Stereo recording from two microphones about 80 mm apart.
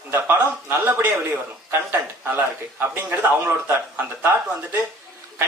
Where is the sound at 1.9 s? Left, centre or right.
Right.